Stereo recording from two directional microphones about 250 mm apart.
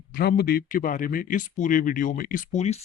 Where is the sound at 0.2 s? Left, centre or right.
Left.